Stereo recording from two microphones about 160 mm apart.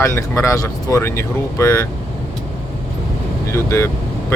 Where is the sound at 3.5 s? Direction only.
20° left (ahead or behind).